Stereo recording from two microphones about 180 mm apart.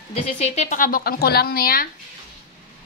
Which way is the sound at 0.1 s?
35° left (ahead or behind).